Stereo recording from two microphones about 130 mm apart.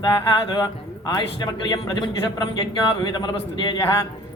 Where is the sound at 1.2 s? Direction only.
35° left (ahead or behind).